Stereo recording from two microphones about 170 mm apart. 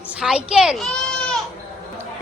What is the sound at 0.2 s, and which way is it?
Speech, 5° right (ahead or behind).